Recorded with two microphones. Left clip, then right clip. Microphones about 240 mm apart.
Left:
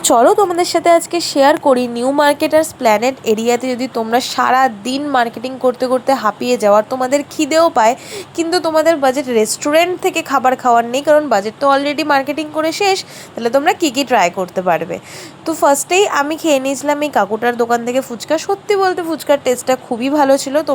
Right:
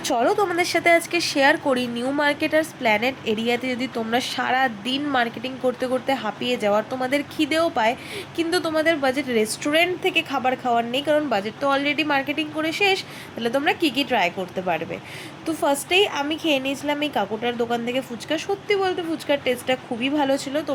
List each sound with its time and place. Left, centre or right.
0.0 s a woman's voice: left
0.3 s a woman's voice: centre